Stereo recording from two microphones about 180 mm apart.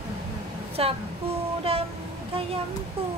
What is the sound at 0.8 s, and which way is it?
Speech, 30° right (ahead or behind).